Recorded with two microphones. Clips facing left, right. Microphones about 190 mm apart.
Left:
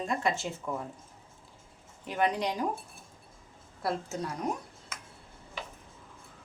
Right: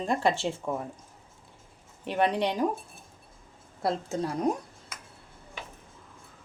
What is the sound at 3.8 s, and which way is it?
Speech, 30° right (ahead or behind).